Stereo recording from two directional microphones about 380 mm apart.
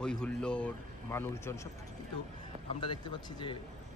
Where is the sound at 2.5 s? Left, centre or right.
Centre.